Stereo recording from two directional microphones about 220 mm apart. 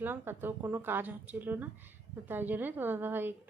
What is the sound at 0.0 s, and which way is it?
A woman's voice, 10° right (ahead or behind).